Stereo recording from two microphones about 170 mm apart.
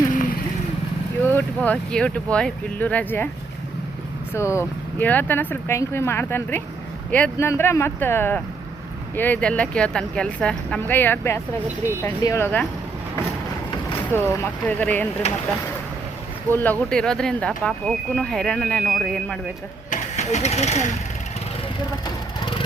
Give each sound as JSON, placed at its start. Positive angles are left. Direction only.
{"t": 1.3, "sound": "speech", "side_deg": 10}
{"t": 4.4, "sound": "speech", "side_deg": 15}
{"t": 14.3, "sound": "speech", "side_deg": 10}
{"t": 15.2, "sound": "speech", "side_deg": 40}
{"t": 16.5, "sound": "speech", "side_deg": 10}
{"t": 19.9, "sound": "vehicle", "side_deg": 45}